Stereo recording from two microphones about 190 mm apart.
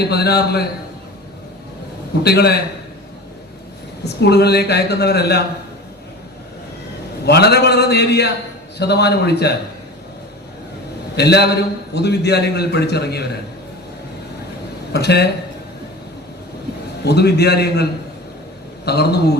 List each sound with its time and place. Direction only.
0.0 s a man's voice: 60° left (ahead or behind)
2.2 s a man's voice: 60° left (ahead or behind)
4.0 s a man's voice: 60° left (ahead or behind)
7.3 s a man's voice: 60° left (ahead or behind)
11.2 s a man's voice: 60° left (ahead or behind)
14.9 s a man's voice: 60° left (ahead or behind)
17.0 s a man's voice: 60° left (ahead or behind)
18.9 s a man's voice: 60° left (ahead or behind)